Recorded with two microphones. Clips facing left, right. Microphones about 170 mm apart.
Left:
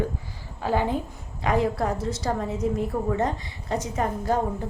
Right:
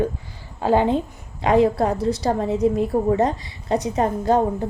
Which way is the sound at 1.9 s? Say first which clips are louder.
Right 6 dB; 65° right (ahead or behind).